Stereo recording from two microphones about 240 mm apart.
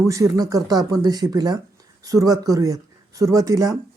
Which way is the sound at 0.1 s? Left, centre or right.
Centre.